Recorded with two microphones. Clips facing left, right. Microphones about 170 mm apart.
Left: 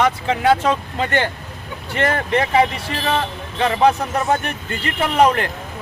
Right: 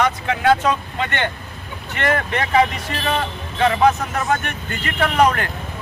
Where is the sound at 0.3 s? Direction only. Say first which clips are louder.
Right 1 dB; 30° left (ahead or behind).